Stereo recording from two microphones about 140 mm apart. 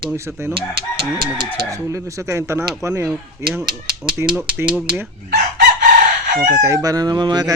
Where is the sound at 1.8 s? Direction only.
20° right (ahead or behind).